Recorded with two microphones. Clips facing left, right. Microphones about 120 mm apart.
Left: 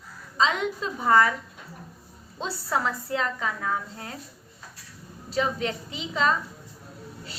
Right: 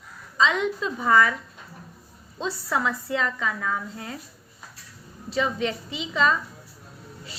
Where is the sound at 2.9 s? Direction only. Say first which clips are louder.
Right 1 dB; 40° left (ahead or behind).